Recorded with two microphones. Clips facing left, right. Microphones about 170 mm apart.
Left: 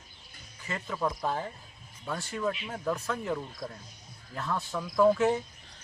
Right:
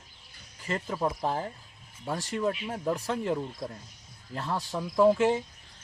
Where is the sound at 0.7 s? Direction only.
30° right (ahead or behind).